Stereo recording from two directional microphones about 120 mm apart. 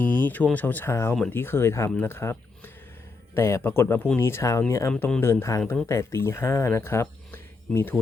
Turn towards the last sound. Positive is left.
turn(degrees=5)  # may be behind; listen again after turning